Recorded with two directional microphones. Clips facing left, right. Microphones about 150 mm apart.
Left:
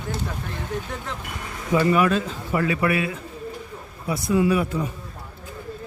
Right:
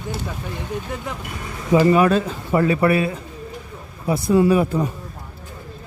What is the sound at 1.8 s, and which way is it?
Speech, 35° right (ahead or behind).